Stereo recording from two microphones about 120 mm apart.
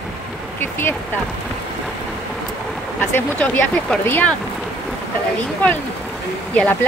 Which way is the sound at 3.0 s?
15° left (ahead or behind).